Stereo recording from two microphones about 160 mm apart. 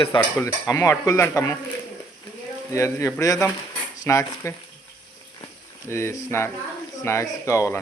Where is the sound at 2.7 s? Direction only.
20° left (ahead or behind).